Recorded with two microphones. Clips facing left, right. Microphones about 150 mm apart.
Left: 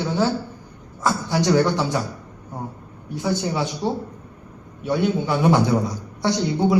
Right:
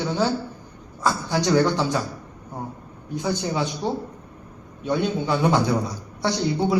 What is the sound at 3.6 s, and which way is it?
Speech, 20° left (ahead or behind).